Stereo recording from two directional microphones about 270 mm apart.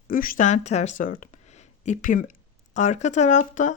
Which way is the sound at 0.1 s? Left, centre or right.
Left.